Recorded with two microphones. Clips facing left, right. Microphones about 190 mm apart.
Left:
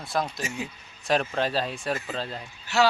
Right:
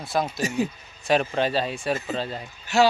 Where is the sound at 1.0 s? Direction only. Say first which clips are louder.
Right 3 dB; centre (ahead or behind).